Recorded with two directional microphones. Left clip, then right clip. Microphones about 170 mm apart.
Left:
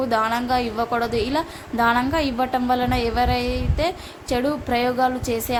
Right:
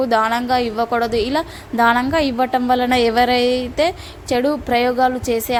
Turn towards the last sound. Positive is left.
turn(degrees=-35)  # may be behind; listen again after turning